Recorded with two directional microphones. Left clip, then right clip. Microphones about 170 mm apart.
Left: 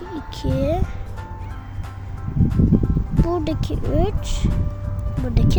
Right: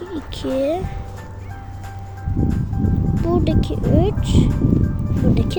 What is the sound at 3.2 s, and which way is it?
Speech, 20° left (ahead or behind).